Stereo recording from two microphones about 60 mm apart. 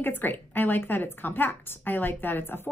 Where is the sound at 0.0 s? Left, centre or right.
Left.